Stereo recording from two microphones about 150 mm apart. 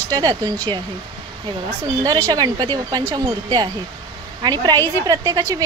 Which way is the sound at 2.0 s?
25° right (ahead or behind).